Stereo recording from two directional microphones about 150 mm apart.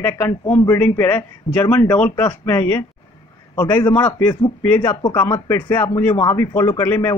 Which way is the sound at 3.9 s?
10° left (ahead or behind).